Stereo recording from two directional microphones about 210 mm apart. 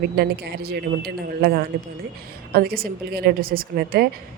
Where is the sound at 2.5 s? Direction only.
45° right (ahead or behind).